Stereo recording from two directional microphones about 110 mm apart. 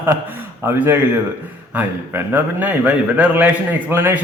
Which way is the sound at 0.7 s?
20° right (ahead or behind).